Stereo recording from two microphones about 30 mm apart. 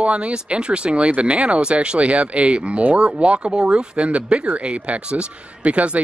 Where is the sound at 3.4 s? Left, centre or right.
Right.